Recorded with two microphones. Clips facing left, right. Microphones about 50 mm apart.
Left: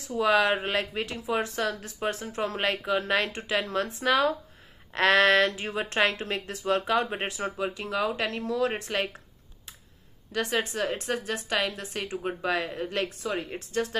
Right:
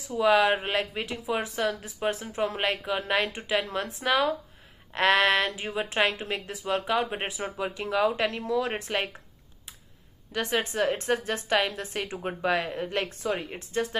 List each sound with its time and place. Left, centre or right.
0.2 s speech: centre
6.7 s speech: centre
7.2 s speech: centre
10.3 s a woman's voice: right
12.2 s speech: right